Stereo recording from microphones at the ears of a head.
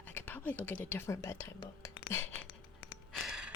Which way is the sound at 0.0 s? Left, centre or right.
Left.